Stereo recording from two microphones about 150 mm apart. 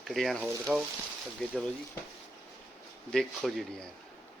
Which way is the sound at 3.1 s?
Centre (ahead or behind).